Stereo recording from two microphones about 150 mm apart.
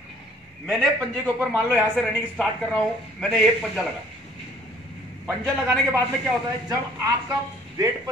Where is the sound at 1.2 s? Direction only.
10° right (ahead or behind).